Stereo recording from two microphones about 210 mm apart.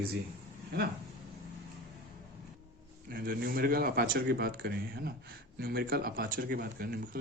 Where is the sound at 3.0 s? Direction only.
45° right (ahead or behind).